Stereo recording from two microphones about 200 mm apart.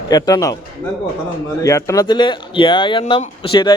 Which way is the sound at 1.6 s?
15° left (ahead or behind).